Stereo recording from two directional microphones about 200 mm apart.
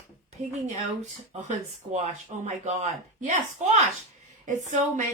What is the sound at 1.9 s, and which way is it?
A woman's voice, 35° right (ahead or behind).